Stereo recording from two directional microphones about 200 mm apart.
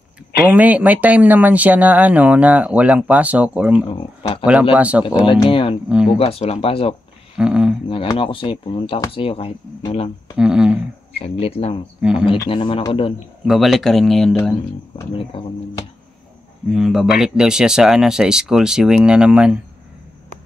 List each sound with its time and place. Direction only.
0.5 s speech: 10° right (ahead or behind)
3.9 s speech: 25° left (ahead or behind)
4.7 s speech: 5° right (ahead or behind)
5.2 s speech: 25° left (ahead or behind)
5.9 s speech: 5° right (ahead or behind)
6.1 s speech: 30° left (ahead or behind)
7.3 s speech: 5° right (ahead or behind)
8.2 s speech: 25° left (ahead or behind)
10.3 s speech: 5° right (ahead or behind)
11.2 s speech: 30° left (ahead or behind)
12.0 s speech: 5° right (ahead or behind)
12.3 s speech: 25° left (ahead or behind)
13.5 s speech: centre (ahead or behind)
16.7 s speech: centre (ahead or behind)